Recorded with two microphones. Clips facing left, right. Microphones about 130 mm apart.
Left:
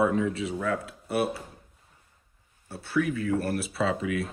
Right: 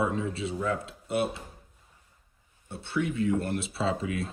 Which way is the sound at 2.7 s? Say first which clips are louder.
Left 2 dB; 25° right (ahead or behind).